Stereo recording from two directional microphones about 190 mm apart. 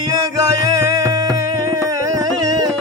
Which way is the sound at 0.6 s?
20° right (ahead or behind).